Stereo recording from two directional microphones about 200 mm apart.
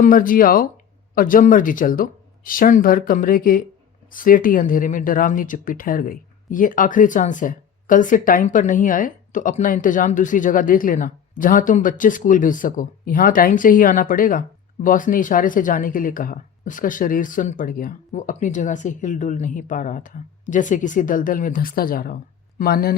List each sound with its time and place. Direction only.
0.0 s speech: 45° left (ahead or behind)